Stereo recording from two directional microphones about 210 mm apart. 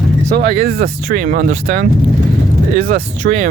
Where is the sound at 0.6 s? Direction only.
45° right (ahead or behind).